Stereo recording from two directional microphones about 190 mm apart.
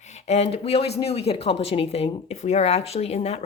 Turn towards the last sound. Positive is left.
turn(degrees=35)  # may be behind; listen again after turning